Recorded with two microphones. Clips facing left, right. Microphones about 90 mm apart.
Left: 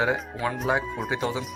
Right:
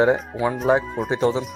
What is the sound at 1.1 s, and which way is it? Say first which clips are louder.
Speech: right 8 dB; 35° right (ahead or behind).